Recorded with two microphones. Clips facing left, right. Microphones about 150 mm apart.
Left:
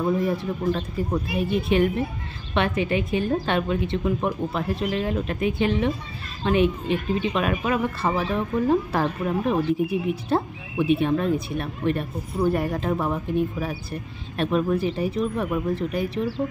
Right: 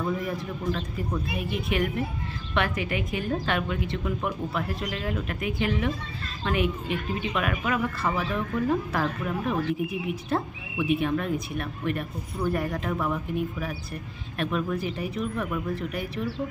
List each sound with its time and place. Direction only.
0.7 s speech: 30° left (ahead or behind)